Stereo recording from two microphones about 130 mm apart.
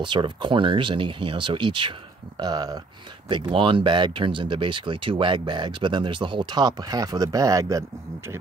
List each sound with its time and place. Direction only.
0.0 s speech: 40° right (ahead or behind)